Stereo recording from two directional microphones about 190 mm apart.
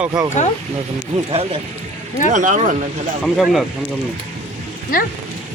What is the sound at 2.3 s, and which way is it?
Speech, 40° right (ahead or behind).